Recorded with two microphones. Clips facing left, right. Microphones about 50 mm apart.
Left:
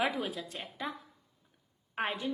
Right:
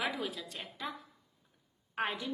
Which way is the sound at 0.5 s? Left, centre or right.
Centre.